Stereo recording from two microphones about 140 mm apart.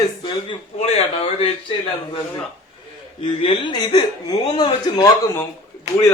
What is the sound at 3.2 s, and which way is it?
A man's voice, 40° left (ahead or behind).